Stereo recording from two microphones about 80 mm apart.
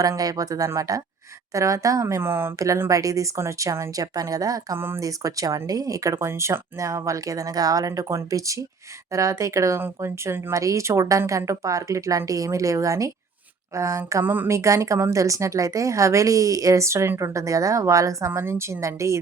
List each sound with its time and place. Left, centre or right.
0.0 s a woman's voice: right
2.9 s a woman's voice: right
10.5 s a woman's voice: right
14.1 s a woman's voice: right
14.5 s a woman's voice: right
18.3 s a woman's voice: right